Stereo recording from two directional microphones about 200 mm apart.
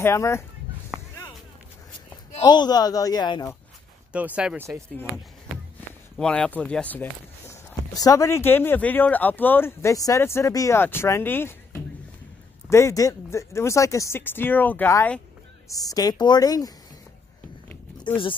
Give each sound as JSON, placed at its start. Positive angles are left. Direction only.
{"t": 0.0, "sound": "speech", "side_deg": 15}
{"t": 0.9, "sound": "a sound", "side_deg": -5}
{"t": 2.3, "sound": "speech", "side_deg": 20}
{"t": 4.1, "sound": "speech", "side_deg": -5}
{"t": 6.1, "sound": "speech", "side_deg": 5}